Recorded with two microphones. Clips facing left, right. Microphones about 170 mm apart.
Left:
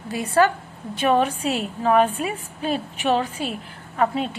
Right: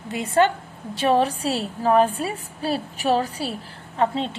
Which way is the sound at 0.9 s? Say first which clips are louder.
Even; 35° right (ahead or behind).